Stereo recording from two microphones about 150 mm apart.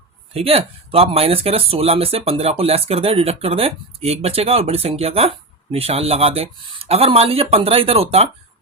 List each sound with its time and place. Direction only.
0.3 s speech: 40° right (ahead or behind)